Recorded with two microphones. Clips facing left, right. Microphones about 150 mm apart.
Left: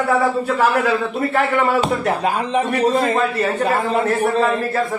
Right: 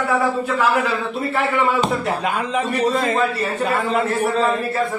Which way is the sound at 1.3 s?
55° left (ahead or behind).